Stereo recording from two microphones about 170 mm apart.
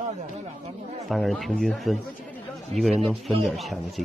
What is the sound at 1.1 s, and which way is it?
A man's voice, centre (ahead or behind).